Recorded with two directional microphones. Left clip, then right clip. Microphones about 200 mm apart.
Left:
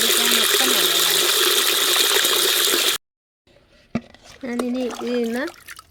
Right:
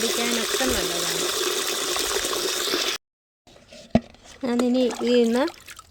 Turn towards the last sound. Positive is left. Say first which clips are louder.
# right 4 dB
turn(degrees=-20)  # may be behind; listen again after turning